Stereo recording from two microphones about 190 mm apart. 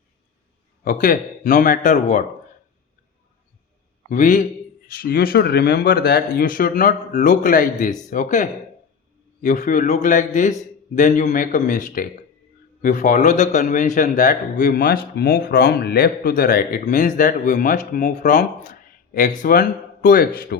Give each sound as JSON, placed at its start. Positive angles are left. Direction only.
{"t": 0.9, "sound": "a man's voice", "side_deg": 45}
{"t": 4.1, "sound": "a man's voice", "side_deg": 45}